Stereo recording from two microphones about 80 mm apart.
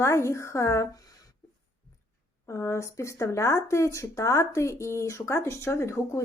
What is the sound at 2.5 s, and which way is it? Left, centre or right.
Speech, left.